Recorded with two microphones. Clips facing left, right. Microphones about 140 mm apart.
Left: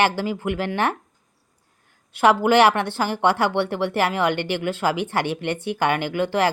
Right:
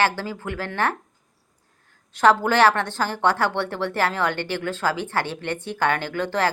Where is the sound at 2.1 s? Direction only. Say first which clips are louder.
Left 2 dB; 10° left (ahead or behind).